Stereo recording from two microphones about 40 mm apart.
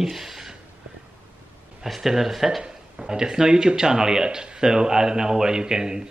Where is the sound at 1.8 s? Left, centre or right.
Centre.